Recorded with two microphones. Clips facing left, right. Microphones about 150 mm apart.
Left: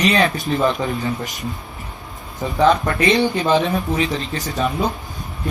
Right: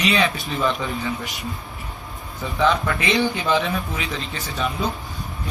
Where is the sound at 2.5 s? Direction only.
40° left (ahead or behind).